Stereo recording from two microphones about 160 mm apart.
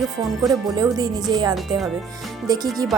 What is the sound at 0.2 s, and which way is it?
Speech, 25° right (ahead or behind).